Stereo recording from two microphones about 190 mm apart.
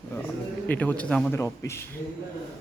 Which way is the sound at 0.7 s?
10° left (ahead or behind).